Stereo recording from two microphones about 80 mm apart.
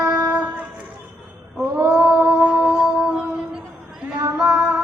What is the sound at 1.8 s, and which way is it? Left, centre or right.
Female singing, centre.